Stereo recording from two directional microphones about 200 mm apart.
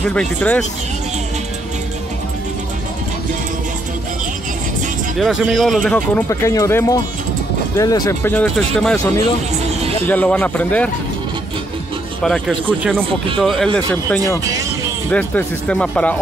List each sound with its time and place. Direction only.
0.0 s speech: 5° left (ahead or behind)
5.1 s speech: centre (ahead or behind)
6.2 s speech: 15° left (ahead or behind)
12.2 s speech: 5° left (ahead or behind)